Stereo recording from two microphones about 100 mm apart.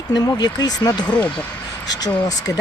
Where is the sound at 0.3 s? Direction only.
40° left (ahead or behind).